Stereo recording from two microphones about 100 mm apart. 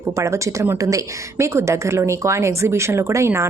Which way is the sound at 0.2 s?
30° right (ahead or behind).